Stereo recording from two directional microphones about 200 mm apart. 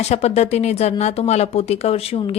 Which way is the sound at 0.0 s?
30° left (ahead or behind).